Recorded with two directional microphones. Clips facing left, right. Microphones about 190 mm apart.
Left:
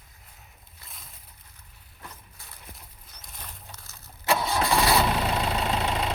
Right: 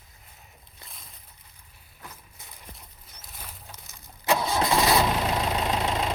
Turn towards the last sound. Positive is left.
turn(degrees=-5)  # may be behind; listen again after turning